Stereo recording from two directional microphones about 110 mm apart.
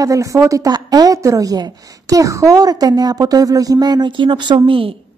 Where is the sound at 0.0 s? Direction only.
30° right (ahead or behind); by 4.9 s 55° right (ahead or behind).